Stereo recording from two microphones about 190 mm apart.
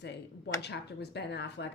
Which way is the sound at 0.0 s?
65° left (ahead or behind).